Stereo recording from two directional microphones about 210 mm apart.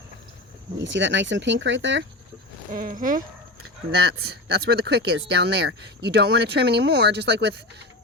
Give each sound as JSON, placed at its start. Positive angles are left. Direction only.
{"t": 0.8, "sound": "speech", "side_deg": -60}
{"t": 2.7, "sound": "speech", "side_deg": -40}